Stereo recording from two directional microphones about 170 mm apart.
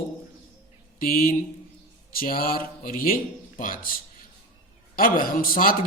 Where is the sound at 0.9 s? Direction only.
55° left (ahead or behind).